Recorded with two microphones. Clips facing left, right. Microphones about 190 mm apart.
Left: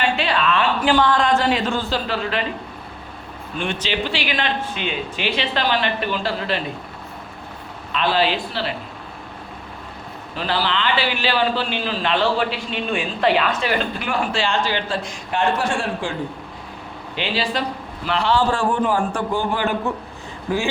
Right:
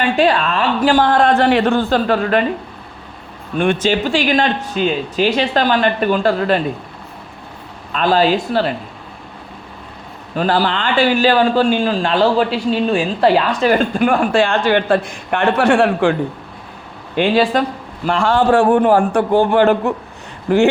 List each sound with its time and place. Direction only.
0.2 s a man's voice: 45° right (ahead or behind)
3.6 s a man's voice: 50° right (ahead or behind)
7.9 s a man's voice: 45° right (ahead or behind)
10.3 s a man's voice: 45° right (ahead or behind); by 16.1 s 65° right (ahead or behind)
17.2 s a man's voice: 50° right (ahead or behind); by 19.9 s 65° right (ahead or behind)